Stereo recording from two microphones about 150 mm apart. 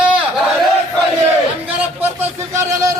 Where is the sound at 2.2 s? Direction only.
20° right (ahead or behind).